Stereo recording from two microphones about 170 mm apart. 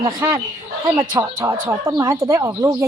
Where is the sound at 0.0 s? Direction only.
15° right (ahead or behind).